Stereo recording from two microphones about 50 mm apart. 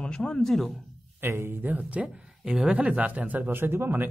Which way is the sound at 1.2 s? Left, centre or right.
Right.